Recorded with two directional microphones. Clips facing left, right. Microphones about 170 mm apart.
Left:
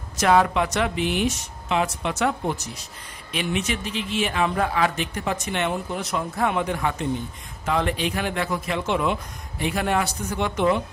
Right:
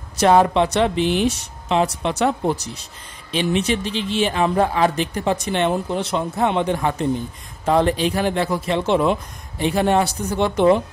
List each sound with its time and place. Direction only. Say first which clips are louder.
0.2 s speech: right 4 dB; 30° right (ahead or behind)